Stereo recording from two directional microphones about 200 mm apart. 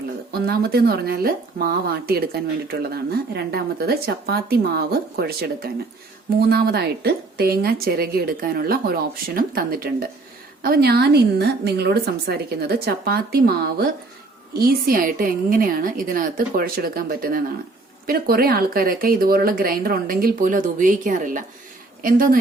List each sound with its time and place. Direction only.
0.4 s speech: 50° right (ahead or behind)